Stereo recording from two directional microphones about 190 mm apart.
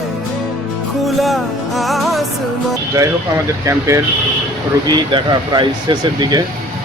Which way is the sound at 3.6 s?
15° right (ahead or behind).